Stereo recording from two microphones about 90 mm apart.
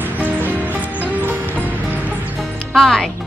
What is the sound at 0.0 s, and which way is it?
Music, 20° right (ahead or behind).